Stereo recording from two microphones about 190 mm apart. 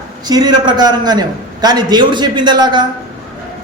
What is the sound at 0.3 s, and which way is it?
Speech, 20° right (ahead or behind).